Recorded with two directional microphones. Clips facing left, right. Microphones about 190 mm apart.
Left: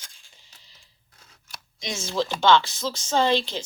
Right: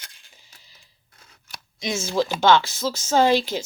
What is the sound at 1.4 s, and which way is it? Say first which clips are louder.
Speech: right 5 dB; 5° right (ahead or behind).